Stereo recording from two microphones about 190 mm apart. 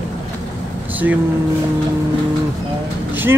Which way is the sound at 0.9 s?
10° right (ahead or behind).